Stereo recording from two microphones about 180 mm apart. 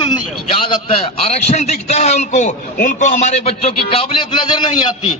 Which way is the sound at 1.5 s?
35° left (ahead or behind).